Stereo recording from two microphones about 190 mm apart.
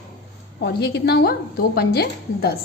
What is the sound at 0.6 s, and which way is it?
A woman's voice, 60° left (ahead or behind).